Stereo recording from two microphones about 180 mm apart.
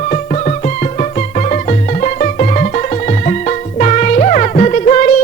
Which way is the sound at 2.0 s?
45° left (ahead or behind).